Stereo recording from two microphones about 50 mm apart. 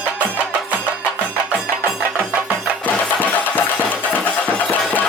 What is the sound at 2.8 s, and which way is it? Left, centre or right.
Music, left.